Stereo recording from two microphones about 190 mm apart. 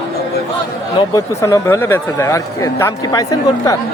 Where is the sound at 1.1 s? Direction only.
15° left (ahead or behind).